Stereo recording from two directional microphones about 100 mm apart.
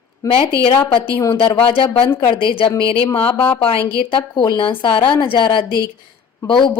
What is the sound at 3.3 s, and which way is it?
Speech, 25° left (ahead or behind).